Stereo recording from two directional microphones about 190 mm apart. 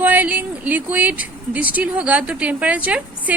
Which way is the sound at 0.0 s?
10° right (ahead or behind).